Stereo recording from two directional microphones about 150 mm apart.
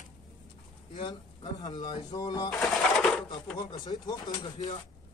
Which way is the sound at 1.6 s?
30° left (ahead or behind).